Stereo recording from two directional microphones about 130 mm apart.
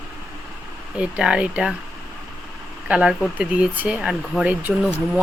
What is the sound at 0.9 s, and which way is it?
Speech, 5° right (ahead or behind).